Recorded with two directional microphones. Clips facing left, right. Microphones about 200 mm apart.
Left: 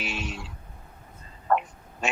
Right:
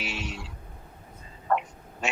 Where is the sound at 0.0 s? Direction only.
50° left (ahead or behind).